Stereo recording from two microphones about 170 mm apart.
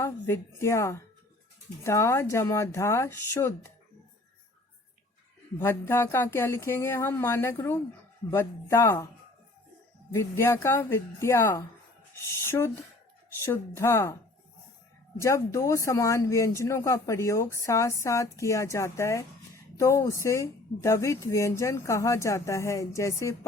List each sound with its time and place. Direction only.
0.0 s speech: 15° left (ahead or behind)
5.5 s speech: 15° left (ahead or behind)
10.1 s speech: 15° left (ahead or behind)
15.2 s speech: 20° left (ahead or behind)